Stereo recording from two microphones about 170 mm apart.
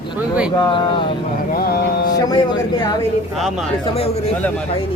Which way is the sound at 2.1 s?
25° left (ahead or behind).